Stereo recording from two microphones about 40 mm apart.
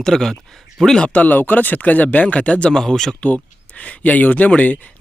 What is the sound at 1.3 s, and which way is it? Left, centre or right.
Speech, left.